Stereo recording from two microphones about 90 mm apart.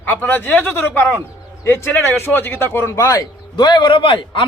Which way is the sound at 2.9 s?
45° left (ahead or behind).